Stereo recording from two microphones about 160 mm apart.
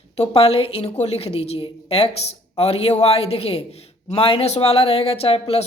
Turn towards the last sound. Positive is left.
turn(degrees=40)  # may be behind; listen again after turning